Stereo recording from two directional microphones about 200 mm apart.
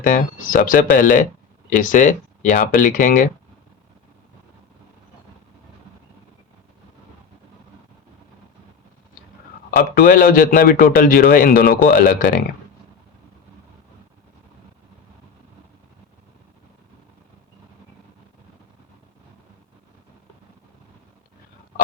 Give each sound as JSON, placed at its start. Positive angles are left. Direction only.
{"t": 0.0, "sound": "a man's voice", "side_deg": 45}
{"t": 9.7, "sound": "a man's voice", "side_deg": 45}